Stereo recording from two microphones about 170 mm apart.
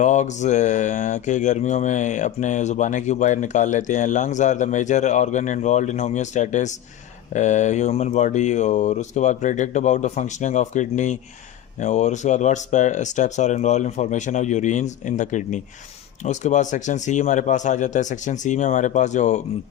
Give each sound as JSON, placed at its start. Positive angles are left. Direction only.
{"t": 0.0, "sound": "mantra", "side_deg": 45}